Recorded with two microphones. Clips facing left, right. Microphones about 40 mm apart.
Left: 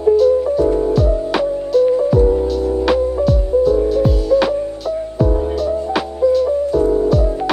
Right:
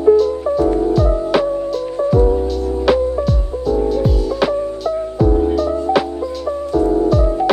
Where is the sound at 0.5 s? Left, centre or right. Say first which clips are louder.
Even; right.